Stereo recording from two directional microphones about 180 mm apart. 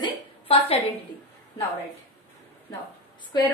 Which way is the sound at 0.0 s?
30° left (ahead or behind).